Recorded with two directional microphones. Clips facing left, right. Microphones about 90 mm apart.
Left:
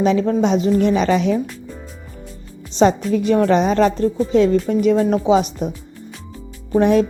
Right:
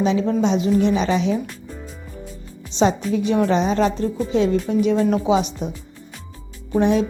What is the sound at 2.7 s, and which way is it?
A woman's voice, 45° left (ahead or behind).